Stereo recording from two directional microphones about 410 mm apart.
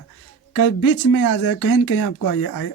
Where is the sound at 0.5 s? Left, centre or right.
Left.